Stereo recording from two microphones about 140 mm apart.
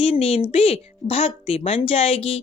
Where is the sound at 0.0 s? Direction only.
45° left (ahead or behind).